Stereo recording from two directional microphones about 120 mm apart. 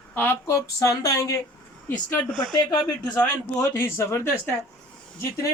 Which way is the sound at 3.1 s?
25° left (ahead or behind).